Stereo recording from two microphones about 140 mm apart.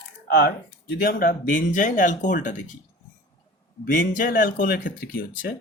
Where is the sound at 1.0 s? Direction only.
80° left.